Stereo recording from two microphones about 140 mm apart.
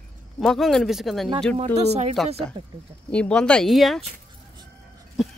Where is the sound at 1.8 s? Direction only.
50° right (ahead or behind).